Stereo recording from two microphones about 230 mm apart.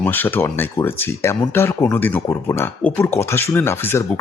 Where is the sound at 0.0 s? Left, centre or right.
Centre.